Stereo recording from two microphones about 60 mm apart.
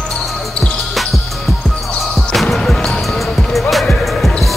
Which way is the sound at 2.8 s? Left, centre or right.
Centre.